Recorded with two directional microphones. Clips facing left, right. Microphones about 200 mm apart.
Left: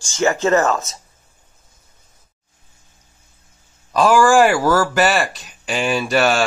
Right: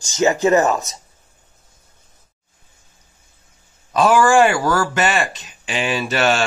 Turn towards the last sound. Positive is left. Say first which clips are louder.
# left 2 dB
turn(degrees=0)  # may be behind; listen again after turning